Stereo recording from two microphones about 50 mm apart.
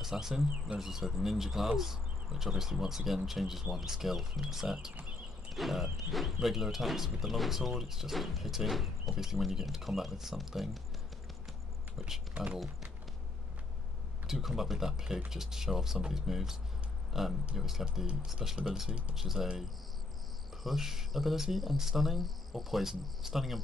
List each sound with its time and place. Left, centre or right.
0.0 s speech: centre
14.2 s speech: centre
18.9 s speech: right
19.1 s speech: centre
20.6 s speech: centre